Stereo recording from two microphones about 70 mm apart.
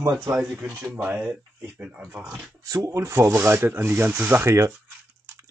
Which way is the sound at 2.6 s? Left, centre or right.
Right.